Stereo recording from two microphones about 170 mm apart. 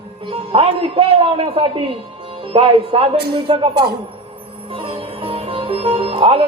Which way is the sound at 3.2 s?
70° right (ahead or behind).